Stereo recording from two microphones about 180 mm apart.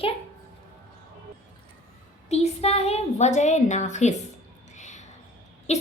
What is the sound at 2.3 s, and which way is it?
A woman's voice, 35° left (ahead or behind).